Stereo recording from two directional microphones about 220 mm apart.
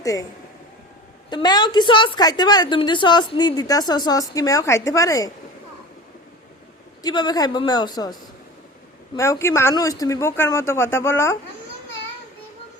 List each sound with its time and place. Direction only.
0.0 s speech: 15° left (ahead or behind)
1.3 s a woman's voice: 20° left (ahead or behind)
7.0 s speech: 20° left (ahead or behind)
9.1 s speech: 15° left (ahead or behind)